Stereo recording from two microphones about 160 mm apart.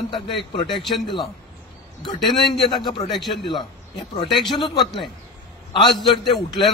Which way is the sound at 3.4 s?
30° left (ahead or behind).